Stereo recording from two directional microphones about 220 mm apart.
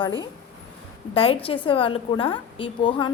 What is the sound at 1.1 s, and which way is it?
A woman's voice, 25° left (ahead or behind).